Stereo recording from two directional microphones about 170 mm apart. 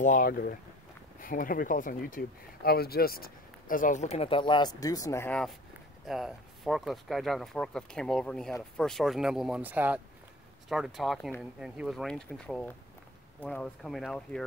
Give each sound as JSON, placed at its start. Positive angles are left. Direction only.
{"t": 0.0, "sound": "speech", "side_deg": 50}
{"t": 6.0, "sound": "speech", "side_deg": 0}